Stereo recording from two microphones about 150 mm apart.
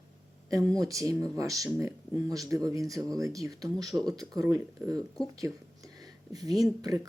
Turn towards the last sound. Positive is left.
turn(degrees=-25)  # may be behind; listen again after turning